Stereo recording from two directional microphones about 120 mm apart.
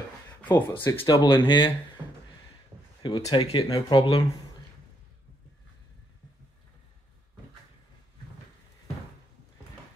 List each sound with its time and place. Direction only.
0.4 s speech: 15° left (ahead or behind)
1.1 s speech: 45° left (ahead or behind)
3.0 s speech: 35° left (ahead or behind)